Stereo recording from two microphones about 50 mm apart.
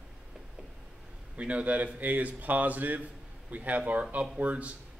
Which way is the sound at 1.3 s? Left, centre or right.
Right.